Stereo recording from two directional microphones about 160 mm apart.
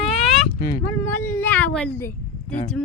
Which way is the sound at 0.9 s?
15° left (ahead or behind).